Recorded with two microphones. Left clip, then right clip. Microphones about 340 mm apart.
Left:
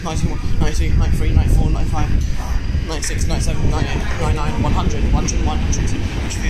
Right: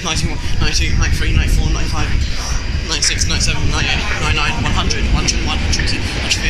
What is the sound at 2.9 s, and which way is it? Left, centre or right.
Speech, left.